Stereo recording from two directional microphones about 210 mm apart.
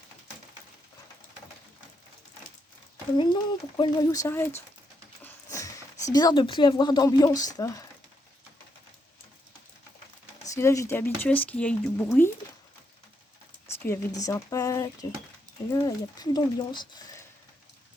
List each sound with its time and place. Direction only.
3.2 s speech: 20° left (ahead or behind)
5.2 s a sound: 15° left (ahead or behind)
6.1 s speech: 20° left (ahead or behind)
10.5 s speech: 15° left (ahead or behind)
13.7 s speech: 10° left (ahead or behind)